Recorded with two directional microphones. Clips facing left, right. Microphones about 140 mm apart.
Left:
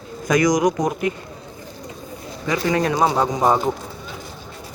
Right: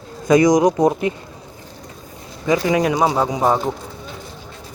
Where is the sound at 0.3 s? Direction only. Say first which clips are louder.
Right 4 dB; 25° right (ahead or behind).